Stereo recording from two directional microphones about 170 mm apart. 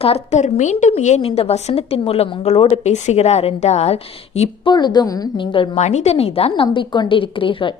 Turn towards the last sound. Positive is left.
turn(degrees=30)  # may be behind; listen again after turning